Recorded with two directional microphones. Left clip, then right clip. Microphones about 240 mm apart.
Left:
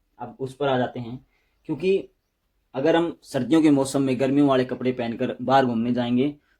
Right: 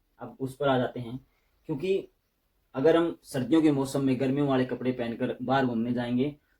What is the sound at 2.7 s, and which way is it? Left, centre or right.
Speech, left.